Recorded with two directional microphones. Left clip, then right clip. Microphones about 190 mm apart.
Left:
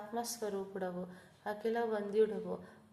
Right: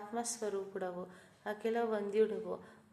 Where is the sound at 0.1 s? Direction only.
10° right (ahead or behind).